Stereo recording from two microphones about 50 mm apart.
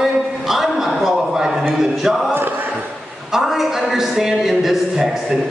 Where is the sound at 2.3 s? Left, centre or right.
Right.